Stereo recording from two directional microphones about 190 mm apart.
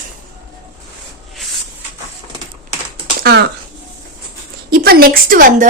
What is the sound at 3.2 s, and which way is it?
Speech, 60° right (ahead or behind).